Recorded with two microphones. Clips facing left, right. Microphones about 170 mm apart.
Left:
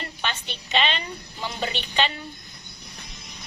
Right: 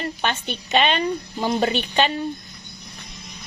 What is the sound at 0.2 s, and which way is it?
A woman's voice, 45° right (ahead or behind).